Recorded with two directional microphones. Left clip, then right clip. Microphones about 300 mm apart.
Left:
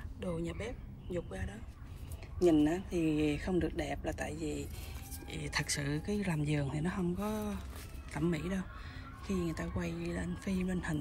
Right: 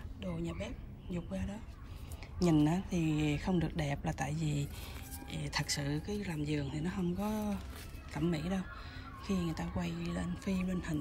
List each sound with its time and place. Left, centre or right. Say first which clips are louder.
0.2 s speech: left 2 dB; centre
2.6 s speech: left 2 dB; centre
5.3 s speech: left 1 dB; centre